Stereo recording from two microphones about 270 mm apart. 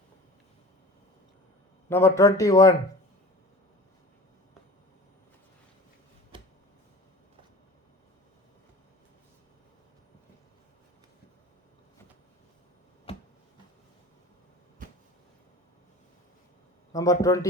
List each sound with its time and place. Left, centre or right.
1.9 s speech: centre
13.1 s a sound: left
16.9 s speech: centre